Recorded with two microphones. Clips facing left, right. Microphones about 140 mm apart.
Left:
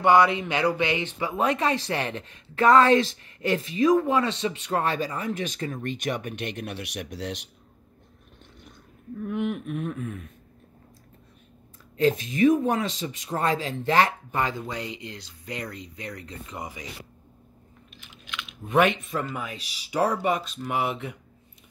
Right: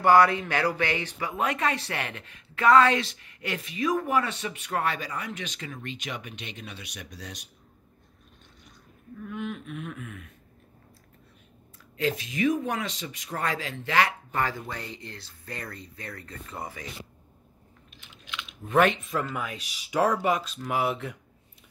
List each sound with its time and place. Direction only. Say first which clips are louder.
0.0 s speech: even; 20° left (ahead or behind)
1.4 s speech: left 3 dB; 30° left (ahead or behind)
2.9 s speech: left 7 dB; 35° left (ahead or behind); by 7.3 s 65° left (ahead or behind)
9.3 s a sound: left 6 dB; 60° left (ahead or behind)
9.8 s speech: left 7 dB; 35° left (ahead or behind)
12.0 s speech: left 6 dB; 45° left (ahead or behind)
12.7 s speech: left 5 dB; 25° left (ahead or behind)
13.5 s speech: left 7 dB; 40° left (ahead or behind)
14.3 s speech: left 2 dB; 20° left (ahead or behind)
18.7 s speech: left 1 dB; centre (ahead or behind)